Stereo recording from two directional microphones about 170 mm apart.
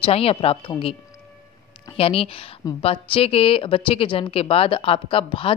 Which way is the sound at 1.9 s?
35° left (ahead or behind).